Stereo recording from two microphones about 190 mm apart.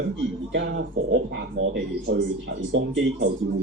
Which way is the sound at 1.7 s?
50° right (ahead or behind).